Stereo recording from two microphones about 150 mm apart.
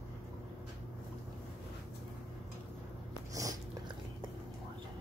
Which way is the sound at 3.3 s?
20° right (ahead or behind).